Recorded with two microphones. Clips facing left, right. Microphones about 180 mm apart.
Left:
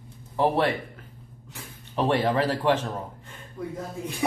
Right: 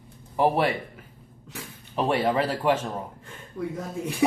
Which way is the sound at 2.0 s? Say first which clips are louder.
Even; 10° right (ahead or behind).